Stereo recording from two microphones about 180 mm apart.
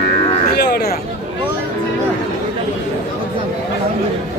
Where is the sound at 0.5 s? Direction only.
65° left (ahead or behind).